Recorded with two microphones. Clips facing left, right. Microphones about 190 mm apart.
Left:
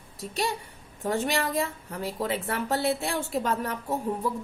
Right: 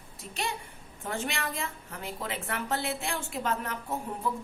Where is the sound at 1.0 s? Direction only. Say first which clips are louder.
Left 7 dB; 40° left (ahead or behind).